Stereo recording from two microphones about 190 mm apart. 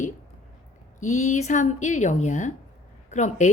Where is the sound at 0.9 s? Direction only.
40° left (ahead or behind).